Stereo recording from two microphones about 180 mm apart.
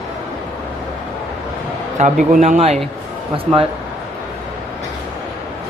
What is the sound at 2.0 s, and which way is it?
Speech, 45° right (ahead or behind).